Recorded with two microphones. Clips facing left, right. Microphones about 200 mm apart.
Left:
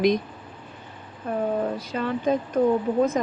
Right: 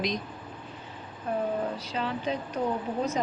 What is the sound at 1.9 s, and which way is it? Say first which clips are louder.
Speech: left 7 dB; 50° left (ahead or behind).